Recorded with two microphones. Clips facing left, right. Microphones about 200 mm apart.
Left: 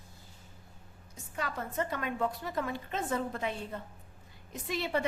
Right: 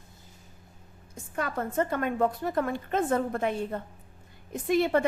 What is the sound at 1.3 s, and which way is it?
A woman's voice, 50° right (ahead or behind).